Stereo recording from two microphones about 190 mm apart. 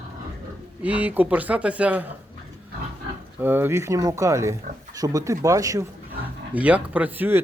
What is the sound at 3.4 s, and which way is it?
Speech, 10° right (ahead or behind).